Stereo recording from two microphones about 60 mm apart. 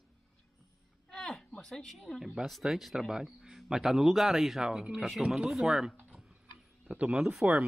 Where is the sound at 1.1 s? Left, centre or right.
Centre.